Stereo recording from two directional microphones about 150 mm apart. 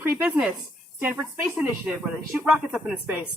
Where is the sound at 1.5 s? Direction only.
15° right (ahead or behind).